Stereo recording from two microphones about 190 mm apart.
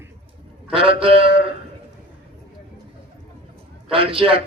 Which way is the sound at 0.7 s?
30° right (ahead or behind).